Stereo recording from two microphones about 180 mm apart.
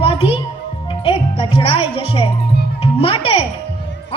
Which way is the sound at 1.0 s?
30° left (ahead or behind).